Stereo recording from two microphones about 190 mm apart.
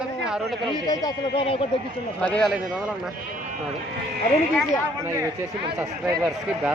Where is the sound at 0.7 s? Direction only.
20° left (ahead or behind).